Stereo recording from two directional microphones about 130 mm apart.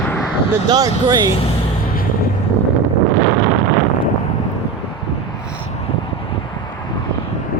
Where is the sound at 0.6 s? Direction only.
30° right (ahead or behind).